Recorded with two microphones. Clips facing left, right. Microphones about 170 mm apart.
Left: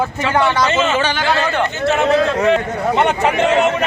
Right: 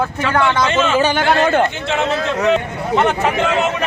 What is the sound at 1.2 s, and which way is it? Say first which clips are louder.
Speech: right 3 dB; 55° right (ahead or behind).